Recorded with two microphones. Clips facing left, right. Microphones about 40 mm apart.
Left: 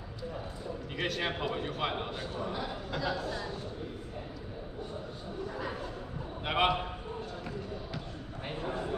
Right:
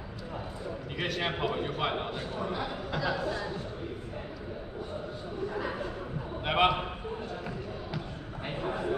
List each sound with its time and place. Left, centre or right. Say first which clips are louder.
0.9 s a man's voice: right 1 dB; centre
6.4 s a man's voice: right 3 dB; centre
8.5 s a sound: right 3 dB; centre